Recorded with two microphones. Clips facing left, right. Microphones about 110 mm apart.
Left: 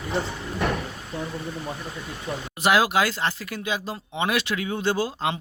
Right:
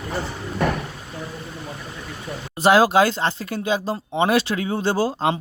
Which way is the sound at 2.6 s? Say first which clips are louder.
Right 5 dB; 30° right (ahead or behind).